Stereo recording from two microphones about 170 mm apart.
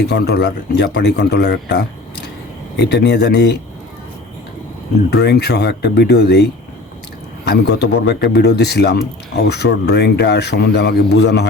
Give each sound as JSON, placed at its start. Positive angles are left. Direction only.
{"t": 0.1, "sound": "a man's voice", "side_deg": 75}
{"t": 5.1, "sound": "a man's voice", "side_deg": 75}